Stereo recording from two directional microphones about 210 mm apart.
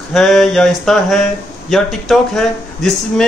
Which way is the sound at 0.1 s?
Centre (ahead or behind).